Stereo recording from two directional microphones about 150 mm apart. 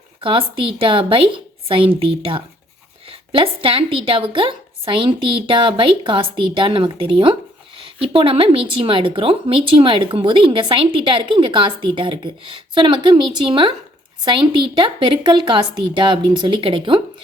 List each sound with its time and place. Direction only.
0.2 s speech: 35° right (ahead or behind)